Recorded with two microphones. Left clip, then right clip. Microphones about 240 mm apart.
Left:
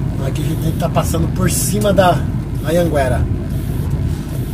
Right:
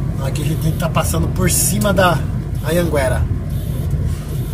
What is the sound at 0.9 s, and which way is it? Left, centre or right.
Speech, right.